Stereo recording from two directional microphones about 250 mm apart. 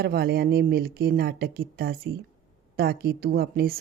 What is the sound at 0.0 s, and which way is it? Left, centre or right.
A woman's voice, right.